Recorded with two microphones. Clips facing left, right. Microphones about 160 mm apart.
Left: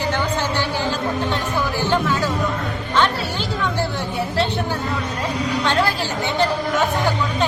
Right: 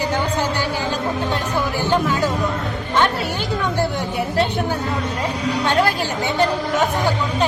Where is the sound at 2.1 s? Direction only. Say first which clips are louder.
Right 1 dB; 15° right (ahead or behind).